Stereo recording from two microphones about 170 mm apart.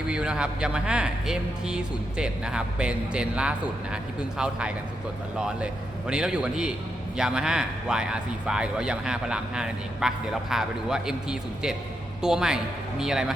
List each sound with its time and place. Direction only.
0.1 s speech: 5° right (ahead or behind)